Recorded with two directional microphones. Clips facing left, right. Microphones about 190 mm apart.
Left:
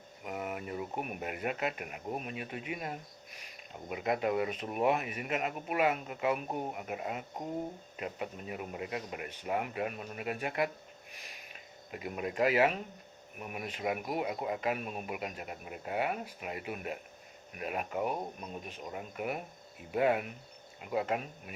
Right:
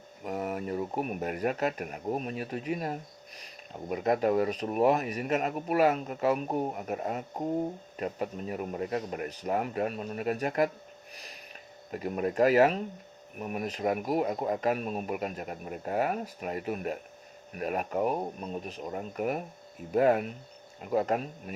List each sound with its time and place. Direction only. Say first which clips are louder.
0.3 s speech: right 6 dB; 40° right (ahead or behind)
11.1 s a sound: right 4 dB; 35° right (ahead or behind)
11.9 s speech: right 7 dB; 40° right (ahead or behind)